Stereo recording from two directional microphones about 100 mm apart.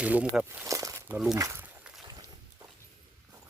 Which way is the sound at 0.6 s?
30° right (ahead or behind).